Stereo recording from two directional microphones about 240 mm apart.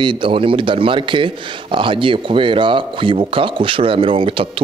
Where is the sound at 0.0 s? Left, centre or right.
Right.